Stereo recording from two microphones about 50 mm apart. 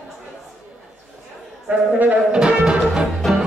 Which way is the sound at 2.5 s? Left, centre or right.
Centre.